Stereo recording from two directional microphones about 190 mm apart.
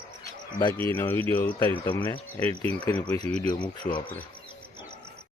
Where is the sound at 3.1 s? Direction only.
35° right (ahead or behind).